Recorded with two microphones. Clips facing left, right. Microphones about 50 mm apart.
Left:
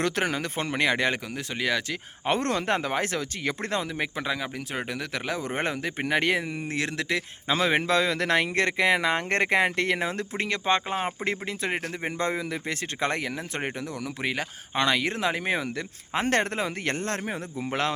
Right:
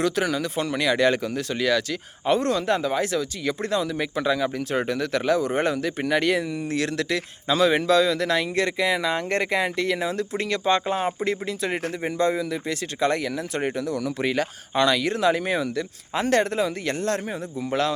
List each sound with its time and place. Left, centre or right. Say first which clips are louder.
0.0 s speech: right 3 dB; left
1.0 s speech: right 6 dB; centre
2.2 s speech: right 4 dB; left
3.9 s speech: right 5 dB; left
5.4 s speech: right 5 dB; left
14.8 s speech: right 4 dB; left